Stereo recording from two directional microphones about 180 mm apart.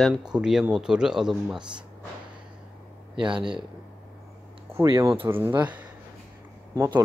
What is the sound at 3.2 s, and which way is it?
Speech, 25° right (ahead or behind).